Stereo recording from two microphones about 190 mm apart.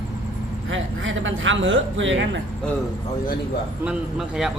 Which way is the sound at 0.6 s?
90° right.